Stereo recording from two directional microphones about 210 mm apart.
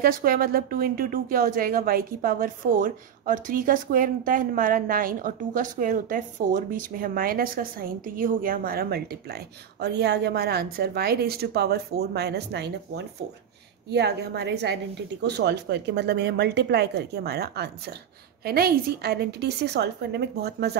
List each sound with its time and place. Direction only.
0.0 s speech: 45° right (ahead or behind)